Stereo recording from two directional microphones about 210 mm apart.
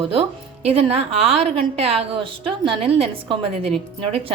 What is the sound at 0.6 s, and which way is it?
A woman's voice, 30° right (ahead or behind).